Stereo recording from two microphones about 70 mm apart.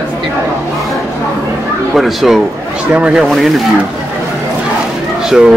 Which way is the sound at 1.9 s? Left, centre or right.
Centre.